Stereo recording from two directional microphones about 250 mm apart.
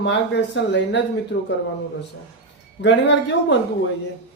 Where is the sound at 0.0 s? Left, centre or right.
Left.